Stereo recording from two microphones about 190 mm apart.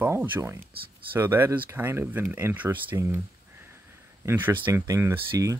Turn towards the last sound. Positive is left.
turn(degrees=-15)  # may be behind; listen again after turning